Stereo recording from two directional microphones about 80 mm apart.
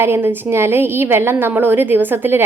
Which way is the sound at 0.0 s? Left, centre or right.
Right.